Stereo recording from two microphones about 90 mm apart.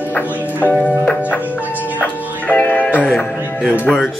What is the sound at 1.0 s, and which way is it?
Music, 15° left (ahead or behind).